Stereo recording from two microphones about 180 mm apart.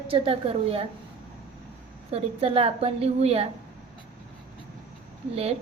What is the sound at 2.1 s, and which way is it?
A woman's voice, 30° right (ahead or behind).